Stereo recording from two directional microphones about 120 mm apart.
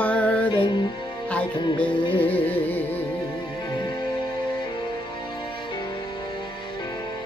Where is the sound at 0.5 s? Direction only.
45° left (ahead or behind).